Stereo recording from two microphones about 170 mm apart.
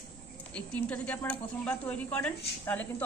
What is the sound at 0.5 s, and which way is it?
Speech, 10° left (ahead or behind).